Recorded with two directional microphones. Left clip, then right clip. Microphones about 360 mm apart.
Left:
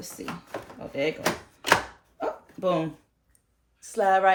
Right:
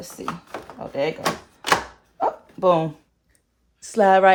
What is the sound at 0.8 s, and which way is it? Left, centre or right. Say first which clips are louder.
Speech: right 4 dB; centre.